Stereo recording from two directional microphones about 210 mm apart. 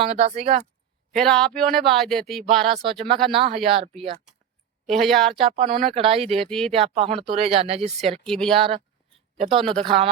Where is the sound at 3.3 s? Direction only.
25° right (ahead or behind).